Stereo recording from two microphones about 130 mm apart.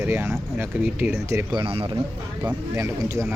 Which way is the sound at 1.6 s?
40° right (ahead or behind).